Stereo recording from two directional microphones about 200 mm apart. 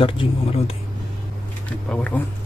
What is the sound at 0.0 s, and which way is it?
Speech, 25° left (ahead or behind).